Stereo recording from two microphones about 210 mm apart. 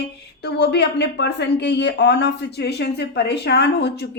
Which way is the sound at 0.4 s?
50° left (ahead or behind).